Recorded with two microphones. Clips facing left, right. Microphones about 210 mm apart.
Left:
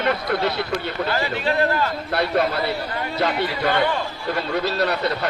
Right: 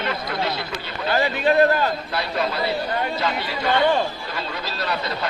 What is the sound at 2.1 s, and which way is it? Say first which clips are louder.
Speech: left 4 dB; 60° left (ahead or behind).